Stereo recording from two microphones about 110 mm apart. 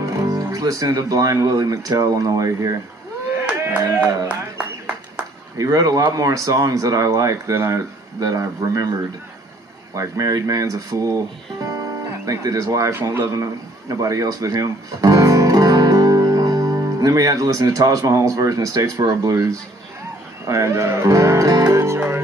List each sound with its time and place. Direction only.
0.0 s speech: 30° right (ahead or behind)
5.6 s speech: 30° right (ahead or behind)
9.9 s a man's voice: 30° right (ahead or behind)